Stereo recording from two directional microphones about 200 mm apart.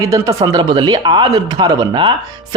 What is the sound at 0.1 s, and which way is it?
Speech, 15° right (ahead or behind).